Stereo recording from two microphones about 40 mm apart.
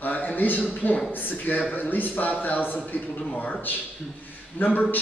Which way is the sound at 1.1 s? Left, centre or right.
Left.